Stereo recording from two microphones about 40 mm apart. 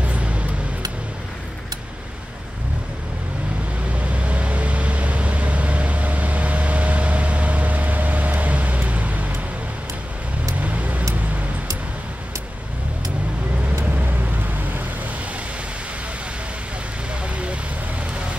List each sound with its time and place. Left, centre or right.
0.0 s a sound: right
4.0 s vehicle: right
10.6 s vehicle: right
13.9 s vehicle: right